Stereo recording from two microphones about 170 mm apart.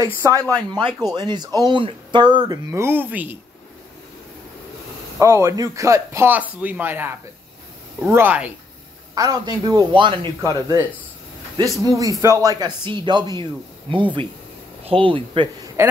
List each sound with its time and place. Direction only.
0.0 s speech: 20° right (ahead or behind)
5.2 s speech: 15° right (ahead or behind)